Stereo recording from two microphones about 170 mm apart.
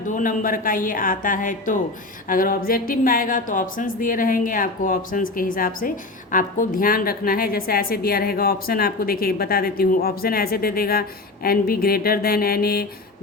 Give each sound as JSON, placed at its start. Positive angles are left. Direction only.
{"t": 0.1, "sound": "a woman's voice", "side_deg": 50}